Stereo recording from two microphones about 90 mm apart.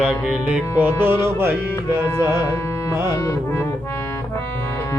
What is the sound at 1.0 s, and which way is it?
Music, 25° right (ahead or behind).